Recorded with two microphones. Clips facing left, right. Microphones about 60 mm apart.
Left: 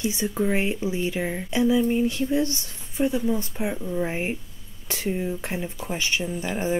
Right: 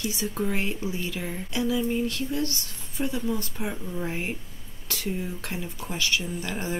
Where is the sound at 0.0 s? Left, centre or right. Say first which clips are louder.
Left 4 dB; left.